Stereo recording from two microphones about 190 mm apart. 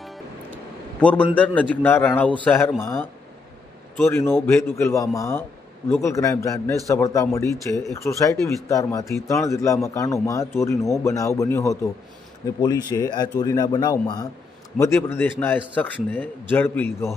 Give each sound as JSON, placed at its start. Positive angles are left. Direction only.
{"t": 1.3, "sound": "a man's voice", "side_deg": 10}
{"t": 2.8, "sound": "a man's voice", "side_deg": 15}